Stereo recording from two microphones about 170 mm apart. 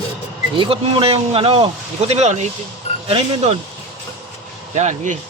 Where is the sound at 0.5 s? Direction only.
30° right (ahead or behind).